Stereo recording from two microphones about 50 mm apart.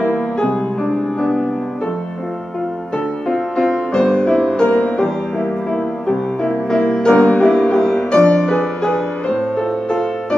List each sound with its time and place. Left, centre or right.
0.0 s music: left
0.5 s music: centre
3.3 s music: centre
7.4 s music: centre